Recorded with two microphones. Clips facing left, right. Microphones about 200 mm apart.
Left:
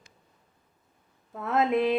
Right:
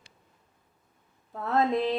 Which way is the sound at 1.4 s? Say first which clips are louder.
Left 1 dB; 15° left (ahead or behind).